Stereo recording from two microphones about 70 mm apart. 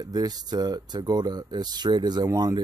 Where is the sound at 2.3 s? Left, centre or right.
Right.